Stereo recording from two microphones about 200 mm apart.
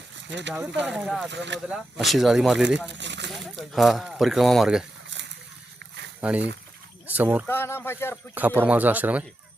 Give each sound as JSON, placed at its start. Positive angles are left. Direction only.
{"t": 0.3, "sound": "speech", "side_deg": -65}
{"t": 0.5, "sound": "speech", "side_deg": -5}
{"t": 1.3, "sound": "speech", "side_deg": -60}
{"t": 1.7, "sound": "speech", "side_deg": 0}
{"t": 2.9, "sound": "a sound", "side_deg": -60}
{"t": 3.3, "sound": "speech", "side_deg": 0}
{"t": 5.1, "sound": "a sound", "side_deg": -65}
{"t": 6.1, "sound": "speech", "side_deg": -5}
{"t": 7.4, "sound": "speech", "side_deg": 10}
{"t": 8.4, "sound": "speech", "side_deg": -10}